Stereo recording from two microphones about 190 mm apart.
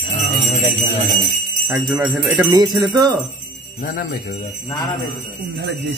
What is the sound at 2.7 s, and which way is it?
Speech, 20° right (ahead or behind).